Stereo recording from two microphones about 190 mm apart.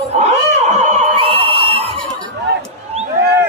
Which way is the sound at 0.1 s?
35° right (ahead or behind).